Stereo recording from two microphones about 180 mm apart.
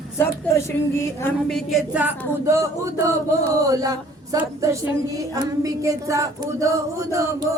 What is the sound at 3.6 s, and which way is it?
A woman's voice, 20° right (ahead or behind).